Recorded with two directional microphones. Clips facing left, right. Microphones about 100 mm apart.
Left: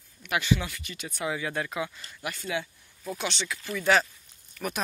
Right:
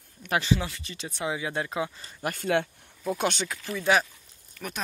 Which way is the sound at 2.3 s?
55° right (ahead or behind).